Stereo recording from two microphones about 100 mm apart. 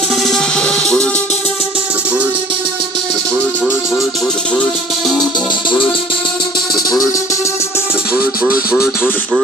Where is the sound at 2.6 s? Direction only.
50° right (ahead or behind).